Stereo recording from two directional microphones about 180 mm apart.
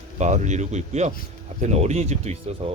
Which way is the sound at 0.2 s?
40° right (ahead or behind).